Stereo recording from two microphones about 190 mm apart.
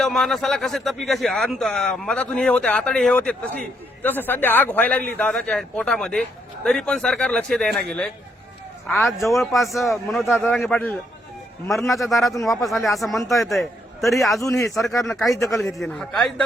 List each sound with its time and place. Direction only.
0.0 s a man's voice: centre (ahead or behind)
14.4 s a man's voice: 15° left (ahead or behind)
15.0 s speech: centre (ahead or behind)